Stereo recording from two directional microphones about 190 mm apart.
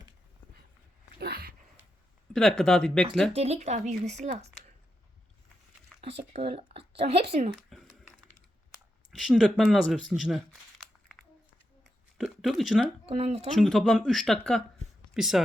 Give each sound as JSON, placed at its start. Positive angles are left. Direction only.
{"t": 1.2, "sound": "a sound", "side_deg": -55}
{"t": 2.3, "sound": "speech", "side_deg": 0}
{"t": 3.3, "sound": "speech", "side_deg": -35}
{"t": 5.9, "sound": "a sound", "side_deg": 0}
{"t": 6.3, "sound": "speech", "side_deg": -30}
{"t": 7.7, "sound": "typing", "side_deg": 0}
{"t": 9.1, "sound": "speech", "side_deg": 0}
{"t": 11.8, "sound": "a sound", "side_deg": 0}
{"t": 13.1, "sound": "speech", "side_deg": -35}
{"t": 13.6, "sound": "speech", "side_deg": 0}